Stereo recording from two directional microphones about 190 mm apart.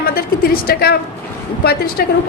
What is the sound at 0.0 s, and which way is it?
A woman's voice, 50° left (ahead or behind).